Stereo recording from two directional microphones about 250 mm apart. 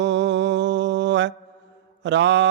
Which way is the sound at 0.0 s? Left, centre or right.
Right.